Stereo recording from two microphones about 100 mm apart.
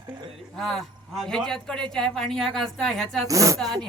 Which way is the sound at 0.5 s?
Centre (ahead or behind).